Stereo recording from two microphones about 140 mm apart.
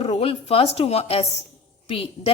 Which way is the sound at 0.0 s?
40° left (ahead or behind).